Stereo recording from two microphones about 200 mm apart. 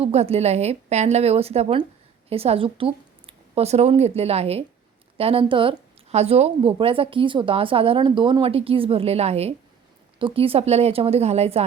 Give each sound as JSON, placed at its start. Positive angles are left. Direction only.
{"t": 0.0, "sound": "a woman's voice", "side_deg": -30}